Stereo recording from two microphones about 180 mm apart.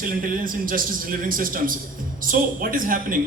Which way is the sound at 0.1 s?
50° right (ahead or behind).